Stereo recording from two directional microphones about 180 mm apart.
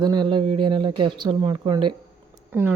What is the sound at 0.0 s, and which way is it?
Speech, 25° right (ahead or behind).